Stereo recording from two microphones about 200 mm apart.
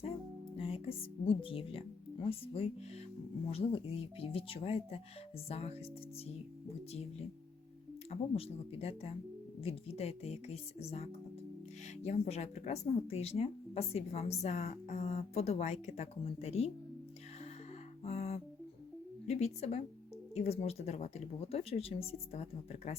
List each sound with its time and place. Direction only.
0.5 s speech: 30° left (ahead or behind)
3.5 s speech: 30° left (ahead or behind)
8.1 s speech: 30° left (ahead or behind)
18.0 s music: 30° left (ahead or behind)
19.3 s speech: 35° left (ahead or behind)